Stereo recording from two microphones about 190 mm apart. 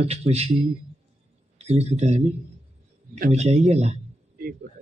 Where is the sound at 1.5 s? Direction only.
35° right (ahead or behind).